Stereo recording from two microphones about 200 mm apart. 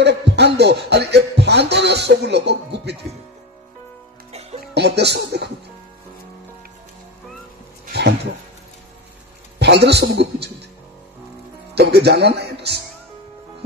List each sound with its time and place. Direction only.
0.0 s music: 60° right (ahead or behind)
0.6 s speech: 55° right (ahead or behind)
4.3 s music: 30° right (ahead or behind)
4.7 s speech: 55° right (ahead or behind)
9.6 s speech: 55° right (ahead or behind)
11.7 s speech: 55° right (ahead or behind)